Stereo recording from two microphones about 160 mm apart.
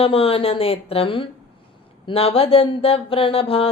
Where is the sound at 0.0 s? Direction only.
35° left (ahead or behind).